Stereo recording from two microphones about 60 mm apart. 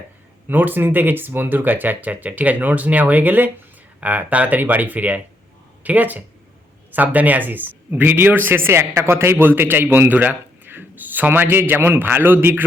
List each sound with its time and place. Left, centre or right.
0.4 s a man's voice: right